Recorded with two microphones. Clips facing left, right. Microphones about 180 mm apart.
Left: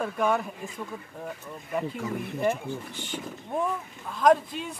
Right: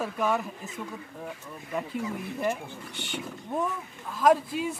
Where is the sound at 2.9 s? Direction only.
70° right (ahead or behind).